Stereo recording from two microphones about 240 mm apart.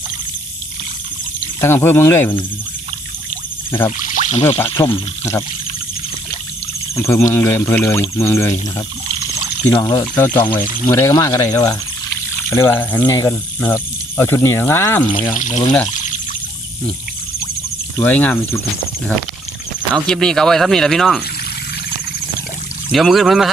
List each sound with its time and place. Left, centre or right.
1.6 s speech: centre
4.0 s speech: left
4.7 s speech: centre
6.9 s speech: centre
9.6 s speech: centre
15.3 s speech: left
15.9 s pour: left
17.9 s speech: centre
19.9 s speech: centre
22.9 s speech: centre